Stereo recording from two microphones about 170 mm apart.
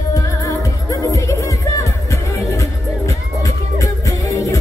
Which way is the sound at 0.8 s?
20° left (ahead or behind).